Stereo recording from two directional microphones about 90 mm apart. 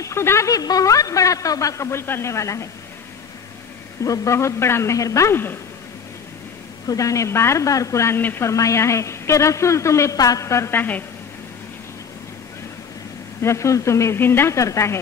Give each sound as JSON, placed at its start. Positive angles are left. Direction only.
{"t": 0.0, "sound": "speech", "side_deg": 30}
{"t": 0.5, "sound": "speech", "side_deg": 45}
{"t": 4.0, "sound": "speech", "side_deg": 35}
{"t": 6.9, "sound": "speech", "side_deg": 35}
{"t": 8.2, "sound": "speech", "side_deg": 20}
{"t": 8.5, "sound": "speech", "side_deg": 35}
{"t": 13.4, "sound": "speech", "side_deg": 35}